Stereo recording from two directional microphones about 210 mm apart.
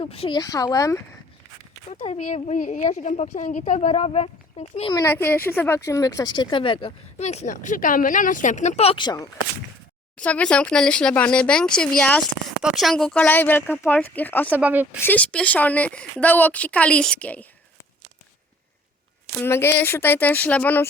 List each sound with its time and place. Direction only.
0.0 s a woman's voice: 25° left (ahead or behind)
1.9 s speech: 30° left (ahead or behind)
10.2 s a woman's voice: 5° left (ahead or behind)
14.6 s a woman's voice: 5° right (ahead or behind)
15.0 s a woman's voice: 5° left (ahead or behind)
19.4 s a woman's voice: 10° left (ahead or behind)